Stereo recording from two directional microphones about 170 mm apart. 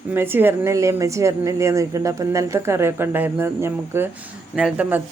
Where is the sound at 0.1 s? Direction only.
15° right (ahead or behind).